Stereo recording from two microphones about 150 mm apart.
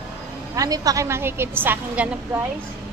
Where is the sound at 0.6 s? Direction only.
25° right (ahead or behind).